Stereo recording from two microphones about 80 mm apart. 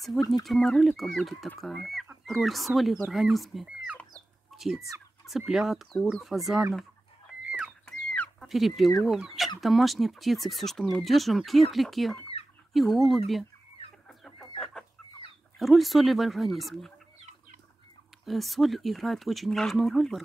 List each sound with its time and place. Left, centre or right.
0.1 s speech: centre
0.5 s speech: centre
3.6 s chicken: centre
4.5 s chicken: centre
5.4 s speech: centre
7.8 s chicken: centre
8.5 s speech: centre
14.0 s chicken: centre
15.6 s speech: centre
18.2 s speech: centre